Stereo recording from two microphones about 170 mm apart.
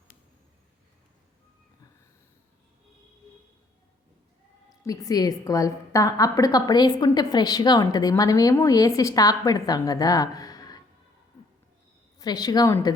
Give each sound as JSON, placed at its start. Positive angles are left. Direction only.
{"t": 4.8, "sound": "a woman's voice", "side_deg": 20}
{"t": 12.2, "sound": "a woman's voice", "side_deg": 25}